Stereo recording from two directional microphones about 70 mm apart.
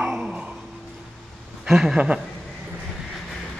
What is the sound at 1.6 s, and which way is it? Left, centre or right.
Speech, centre.